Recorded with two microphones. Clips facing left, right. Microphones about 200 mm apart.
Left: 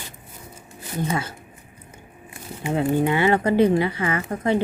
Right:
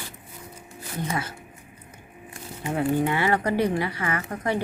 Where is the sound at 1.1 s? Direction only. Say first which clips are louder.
Left 2 dB; 25° left (ahead or behind).